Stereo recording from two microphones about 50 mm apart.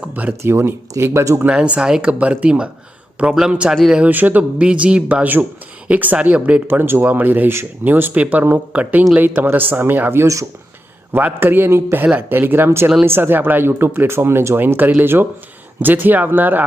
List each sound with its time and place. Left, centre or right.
0.1 s speech: right
0.4 s speech: right
1.4 s speech: right
2.1 s speech: right
4.0 s speech: right
4.5 s speech: right
7.0 s speech: right
8.1 s speech: right
11.3 s speech: right